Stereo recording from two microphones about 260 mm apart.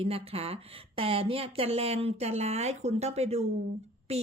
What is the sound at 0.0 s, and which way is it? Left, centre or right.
A woman's voice, right.